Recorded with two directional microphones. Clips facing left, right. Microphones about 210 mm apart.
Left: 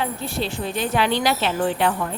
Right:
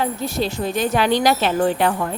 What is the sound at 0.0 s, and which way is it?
Speech, 40° right (ahead or behind).